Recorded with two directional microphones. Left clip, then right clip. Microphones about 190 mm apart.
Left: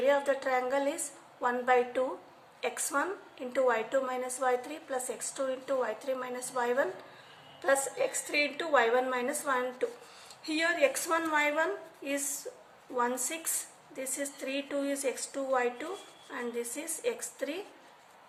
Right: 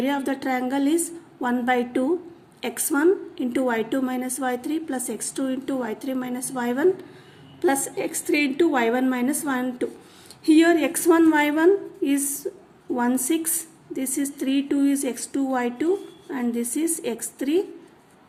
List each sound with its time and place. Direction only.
0.0 s a woman's voice: 50° right (ahead or behind)